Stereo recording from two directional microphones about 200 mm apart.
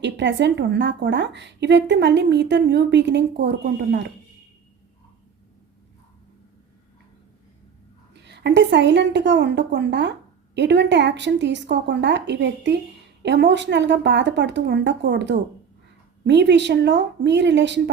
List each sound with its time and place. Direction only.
0.0 s a woman's voice: 60° right (ahead or behind)
8.1 s a woman's voice: 60° right (ahead or behind)